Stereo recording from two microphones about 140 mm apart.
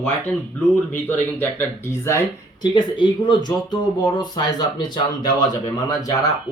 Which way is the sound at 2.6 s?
35° left (ahead or behind).